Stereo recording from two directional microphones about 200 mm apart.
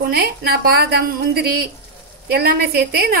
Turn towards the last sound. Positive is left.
turn(degrees=-50)  # may be behind; listen again after turning